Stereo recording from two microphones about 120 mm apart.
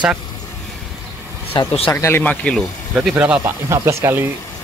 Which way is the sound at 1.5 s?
50° left (ahead or behind).